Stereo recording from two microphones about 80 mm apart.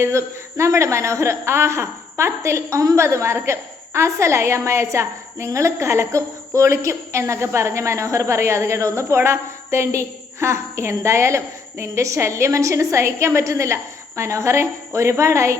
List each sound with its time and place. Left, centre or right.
0.0 s a woman's voice: right